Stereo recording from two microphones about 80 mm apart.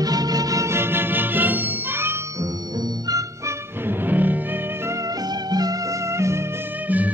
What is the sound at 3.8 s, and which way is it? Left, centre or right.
Music, right.